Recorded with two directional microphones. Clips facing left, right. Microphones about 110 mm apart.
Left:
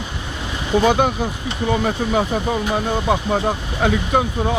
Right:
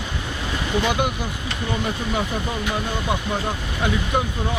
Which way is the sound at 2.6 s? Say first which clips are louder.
Left 5 dB; 30° left (ahead or behind).